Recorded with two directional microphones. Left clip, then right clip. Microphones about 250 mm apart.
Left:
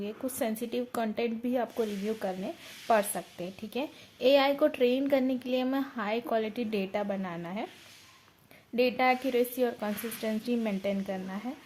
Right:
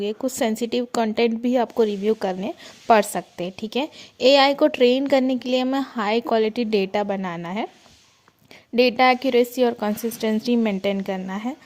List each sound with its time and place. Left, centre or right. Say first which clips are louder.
0.0 s speech: right 10 dB; right
8.7 s speech: right 9 dB; right